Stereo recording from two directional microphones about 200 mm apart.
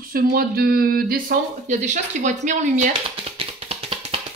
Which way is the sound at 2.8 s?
30° right (ahead or behind).